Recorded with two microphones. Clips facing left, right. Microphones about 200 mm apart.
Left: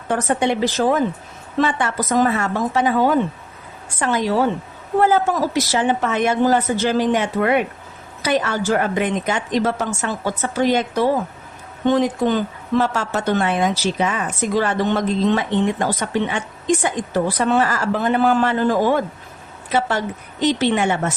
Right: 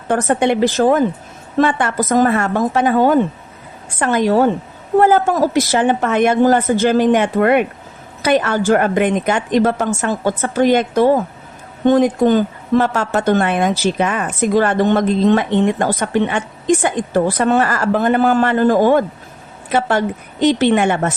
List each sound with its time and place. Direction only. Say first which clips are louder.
0.1 s a woman's voice: right 4 dB; 55° right (ahead or behind)